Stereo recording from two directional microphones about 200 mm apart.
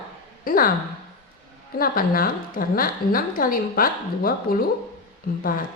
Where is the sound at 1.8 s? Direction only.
45° left (ahead or behind).